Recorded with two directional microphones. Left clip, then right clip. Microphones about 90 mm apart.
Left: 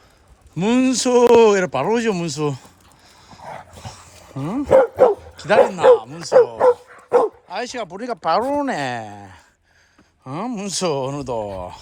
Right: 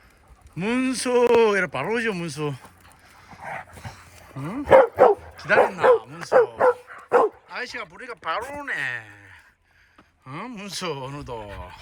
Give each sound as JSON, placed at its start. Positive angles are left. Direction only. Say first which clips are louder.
{"t": 0.5, "sound": "speech", "louder": "left 7 dB", "side_deg": 20}
{"t": 3.2, "sound": "dog", "louder": "even", "side_deg": 15}
{"t": 4.7, "sound": "dog", "louder": "left 1 dB", "side_deg": -5}
{"t": 5.4, "sound": "speech", "louder": "left 5 dB", "side_deg": 20}
{"t": 6.8, "sound": "dog", "louder": "left 2 dB", "side_deg": 10}
{"t": 7.4, "sound": "speech", "louder": "left 6 dB", "side_deg": 30}
{"t": 10.2, "sound": "speech", "louder": "left 8 dB", "side_deg": 30}